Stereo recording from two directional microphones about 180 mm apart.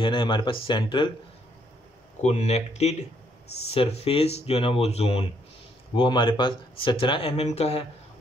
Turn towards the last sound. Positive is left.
turn(degrees=35)  # may be behind; listen again after turning